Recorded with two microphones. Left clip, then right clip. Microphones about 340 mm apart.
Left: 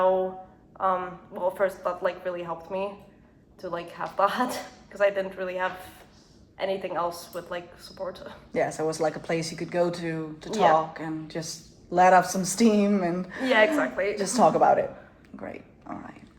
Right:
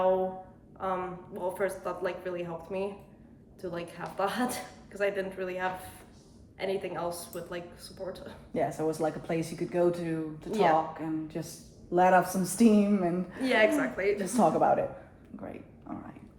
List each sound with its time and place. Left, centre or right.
0.8 s a woman's voice: centre
8.5 s a woman's voice: left
13.5 s a woman's voice: centre
14.3 s a woman's voice: left
15.4 s a sound: left